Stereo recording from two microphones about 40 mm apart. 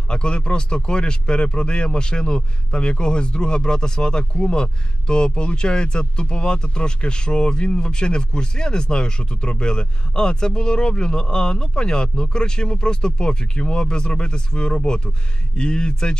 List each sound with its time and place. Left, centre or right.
0.1 s speech: left